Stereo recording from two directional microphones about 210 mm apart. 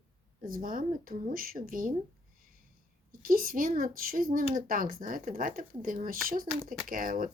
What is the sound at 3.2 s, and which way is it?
Speech, 45° right (ahead or behind).